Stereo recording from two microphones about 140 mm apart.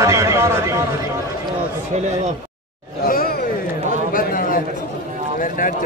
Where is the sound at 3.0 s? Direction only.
90° left.